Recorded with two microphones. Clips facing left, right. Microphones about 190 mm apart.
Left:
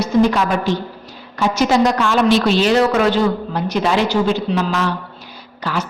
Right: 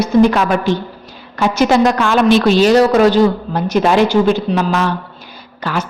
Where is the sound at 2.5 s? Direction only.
40° right (ahead or behind).